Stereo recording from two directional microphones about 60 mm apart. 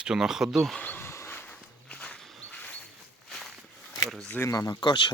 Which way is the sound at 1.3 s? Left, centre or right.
Left.